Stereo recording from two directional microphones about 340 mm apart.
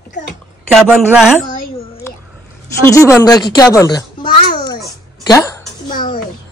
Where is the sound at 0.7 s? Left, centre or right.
Centre.